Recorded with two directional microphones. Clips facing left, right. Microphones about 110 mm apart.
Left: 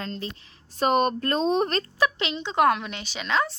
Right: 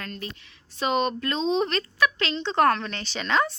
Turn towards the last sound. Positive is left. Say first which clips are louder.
# right 1 dB
turn(degrees=0)  # may be behind; listen again after turning